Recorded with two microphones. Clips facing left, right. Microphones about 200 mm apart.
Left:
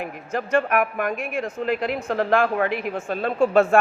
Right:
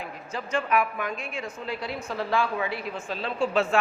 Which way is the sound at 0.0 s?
60° left (ahead or behind).